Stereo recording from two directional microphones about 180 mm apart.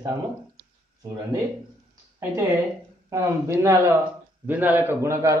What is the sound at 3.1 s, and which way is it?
Speech, 15° right (ahead or behind).